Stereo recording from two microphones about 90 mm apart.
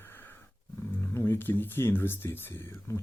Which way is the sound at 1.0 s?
25° left (ahead or behind).